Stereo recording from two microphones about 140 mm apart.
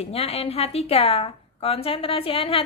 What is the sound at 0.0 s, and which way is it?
A woman's voice, 50° left (ahead or behind).